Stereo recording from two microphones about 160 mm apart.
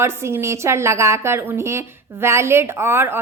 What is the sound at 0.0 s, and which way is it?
A woman's voice, 15° right (ahead or behind).